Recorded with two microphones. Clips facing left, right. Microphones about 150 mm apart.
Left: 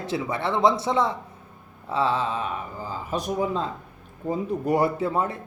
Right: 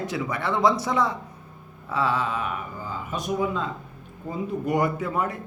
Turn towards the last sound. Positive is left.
turn(degrees=30)  # may be behind; listen again after turning